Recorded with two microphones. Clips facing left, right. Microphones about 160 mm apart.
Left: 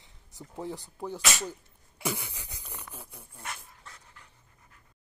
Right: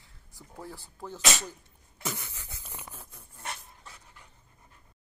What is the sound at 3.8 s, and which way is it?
Dog, 10° right (ahead or behind).